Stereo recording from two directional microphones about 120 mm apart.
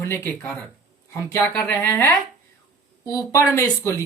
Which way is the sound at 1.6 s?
15° left (ahead or behind).